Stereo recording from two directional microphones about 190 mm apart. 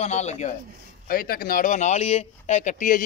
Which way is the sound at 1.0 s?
50° left (ahead or behind).